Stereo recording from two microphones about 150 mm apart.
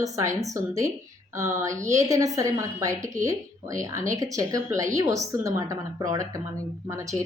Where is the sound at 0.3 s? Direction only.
20° right (ahead or behind).